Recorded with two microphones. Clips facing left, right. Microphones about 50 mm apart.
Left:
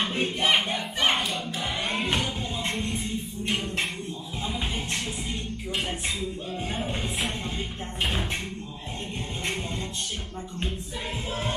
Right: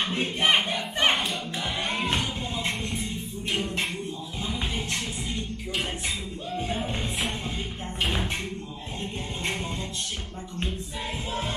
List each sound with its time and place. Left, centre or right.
0.0 s a sound: centre
0.4 s battle cry: right
0.7 s crowd: right
1.1 s choir: centre
6.7 s music: centre